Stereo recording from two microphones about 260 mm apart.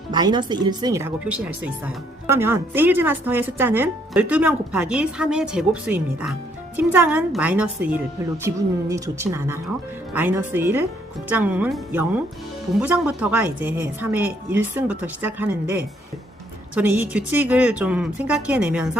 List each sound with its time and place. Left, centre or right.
0.1 s a woman's voice: centre